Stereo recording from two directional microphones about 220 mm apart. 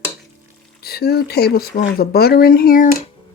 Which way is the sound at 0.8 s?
45° left (ahead or behind).